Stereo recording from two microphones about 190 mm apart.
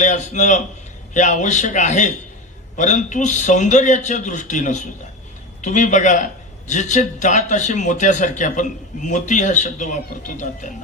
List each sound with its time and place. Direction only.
0.0 s a man's voice: 40° left (ahead or behind)